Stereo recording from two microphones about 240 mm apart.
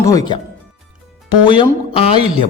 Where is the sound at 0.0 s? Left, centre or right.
Centre.